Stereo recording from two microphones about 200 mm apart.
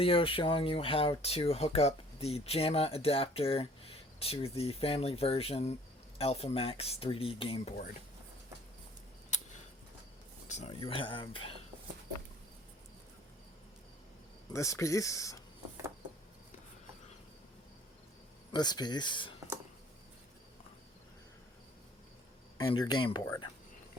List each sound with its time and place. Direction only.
0.0 s speech: 25° left (ahead or behind)
10.5 s speech: 30° left (ahead or behind)
14.5 s speech: 15° left (ahead or behind)
18.5 s speech: 20° left (ahead or behind)
22.5 s speech: 20° left (ahead or behind)